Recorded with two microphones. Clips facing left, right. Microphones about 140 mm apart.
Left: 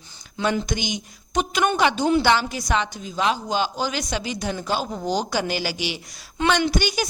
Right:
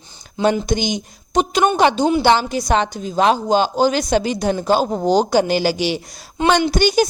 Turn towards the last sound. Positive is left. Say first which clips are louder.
# right 7 dB
turn(degrees=-35)  # may be behind; listen again after turning